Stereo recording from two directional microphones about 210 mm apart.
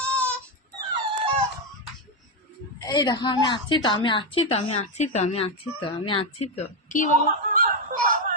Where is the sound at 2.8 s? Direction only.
20° left (ahead or behind); by 7.1 s 40° left (ahead or behind).